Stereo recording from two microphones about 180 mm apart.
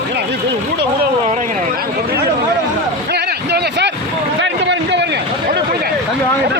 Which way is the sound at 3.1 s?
65° right (ahead or behind).